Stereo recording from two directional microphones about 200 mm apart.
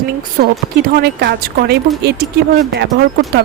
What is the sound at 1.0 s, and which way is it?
A woman's voice, 55° right (ahead or behind).